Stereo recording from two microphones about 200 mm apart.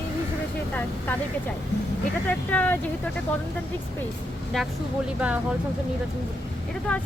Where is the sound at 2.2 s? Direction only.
5° left (ahead or behind).